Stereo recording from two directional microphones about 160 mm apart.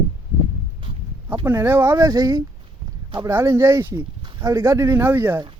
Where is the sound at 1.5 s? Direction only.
15° right (ahead or behind).